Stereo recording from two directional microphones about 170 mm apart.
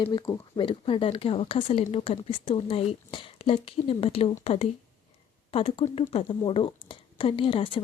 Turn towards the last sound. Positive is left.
turn(degrees=30)  # may be behind; listen again after turning